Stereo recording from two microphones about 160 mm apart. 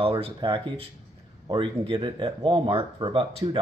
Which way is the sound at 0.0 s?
35° right (ahead or behind).